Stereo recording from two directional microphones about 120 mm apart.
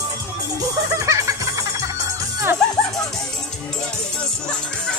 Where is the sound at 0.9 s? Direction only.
25° right (ahead or behind).